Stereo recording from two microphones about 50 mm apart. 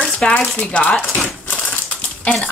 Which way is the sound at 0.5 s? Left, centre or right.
Left.